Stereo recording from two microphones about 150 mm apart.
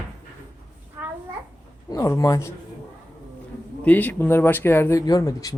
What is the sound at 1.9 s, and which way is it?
Speech, 20° left (ahead or behind).